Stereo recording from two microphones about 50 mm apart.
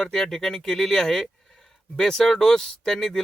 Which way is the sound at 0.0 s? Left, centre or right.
Centre.